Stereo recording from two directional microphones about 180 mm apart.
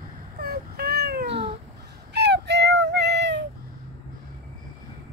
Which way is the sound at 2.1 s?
70° right (ahead or behind).